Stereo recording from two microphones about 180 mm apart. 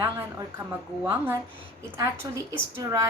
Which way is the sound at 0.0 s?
15° right (ahead or behind).